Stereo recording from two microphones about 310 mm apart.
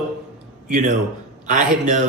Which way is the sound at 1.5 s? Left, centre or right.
Right.